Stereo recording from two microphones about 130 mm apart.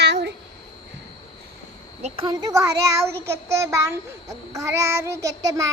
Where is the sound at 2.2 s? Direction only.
30° right (ahead or behind).